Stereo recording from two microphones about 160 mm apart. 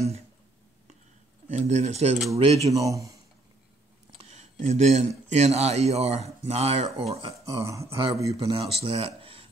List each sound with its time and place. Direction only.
1.5 s speech: 45° right (ahead or behind)
2.8 s speech: 20° right (ahead or behind)
4.2 s a sound: 45° right (ahead or behind)
5.3 s speech: 40° right (ahead or behind)
7.6 s speech: 20° right (ahead or behind)
8.3 s speech: 35° right (ahead or behind)